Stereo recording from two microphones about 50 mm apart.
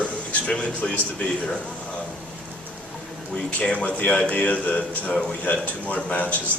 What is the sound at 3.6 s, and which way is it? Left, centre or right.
A man's voice, left.